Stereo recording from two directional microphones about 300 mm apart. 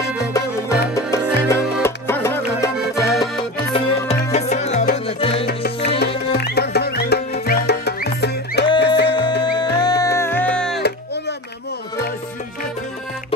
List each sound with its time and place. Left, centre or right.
0.3 s music: centre
3.7 s music: left
5.5 s music: left
9.4 s music: centre